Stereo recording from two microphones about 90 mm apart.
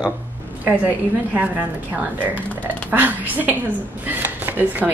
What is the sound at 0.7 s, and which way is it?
A woman's voice, 20° right (ahead or behind).